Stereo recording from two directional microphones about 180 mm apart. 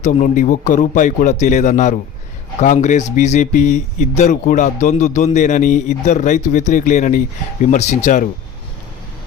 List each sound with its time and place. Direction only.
0.0 s speech: 45° left (ahead or behind)